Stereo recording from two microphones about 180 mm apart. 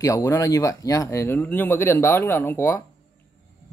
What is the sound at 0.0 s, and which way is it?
Speech, 20° left (ahead or behind).